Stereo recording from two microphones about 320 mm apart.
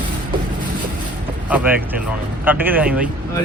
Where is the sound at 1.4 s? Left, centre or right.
Centre.